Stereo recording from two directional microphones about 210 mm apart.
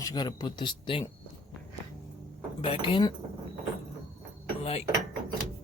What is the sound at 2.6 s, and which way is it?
Speech, 25° left (ahead or behind).